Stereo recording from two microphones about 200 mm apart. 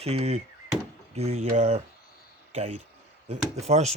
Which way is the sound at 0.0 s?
30° right (ahead or behind).